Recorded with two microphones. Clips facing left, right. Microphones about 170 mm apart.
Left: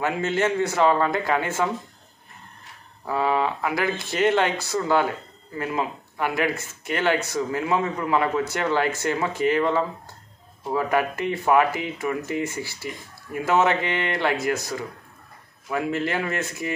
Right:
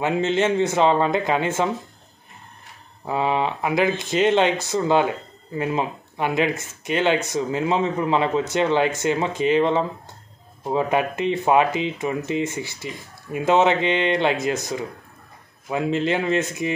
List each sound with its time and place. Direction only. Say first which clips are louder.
0.0 s speech: right 3 dB; 20° right (ahead or behind)
3.1 s speech: right 1 dB; 20° right (ahead or behind)